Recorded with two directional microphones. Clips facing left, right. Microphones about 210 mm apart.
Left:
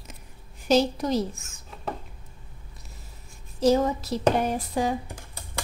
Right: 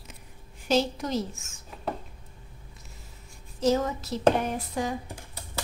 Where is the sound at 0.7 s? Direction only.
40° left (ahead or behind).